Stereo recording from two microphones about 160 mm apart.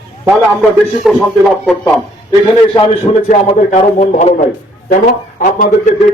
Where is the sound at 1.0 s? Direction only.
Centre (ahead or behind).